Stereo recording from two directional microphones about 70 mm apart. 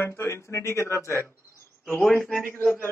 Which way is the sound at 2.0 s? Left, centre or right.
Centre.